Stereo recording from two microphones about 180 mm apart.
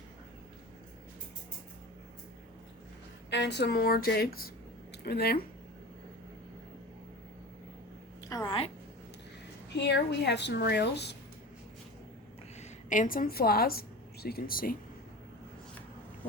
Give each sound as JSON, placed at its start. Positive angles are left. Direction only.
{"t": 3.2, "sound": "speech", "side_deg": 70}
{"t": 8.3, "sound": "a sound", "side_deg": 20}
{"t": 9.7, "sound": "a woman's voice", "side_deg": 70}
{"t": 12.5, "sound": "a woman's voice", "side_deg": 45}